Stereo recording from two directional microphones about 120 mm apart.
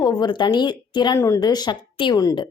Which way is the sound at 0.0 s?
35° left (ahead or behind).